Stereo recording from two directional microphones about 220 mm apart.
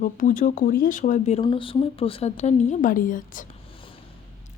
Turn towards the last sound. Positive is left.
turn(degrees=35)  # may be behind; listen again after turning